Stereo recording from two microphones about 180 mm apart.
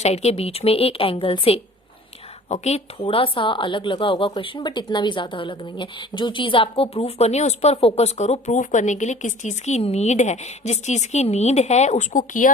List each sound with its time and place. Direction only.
0.0 s speech: 35° left (ahead or behind)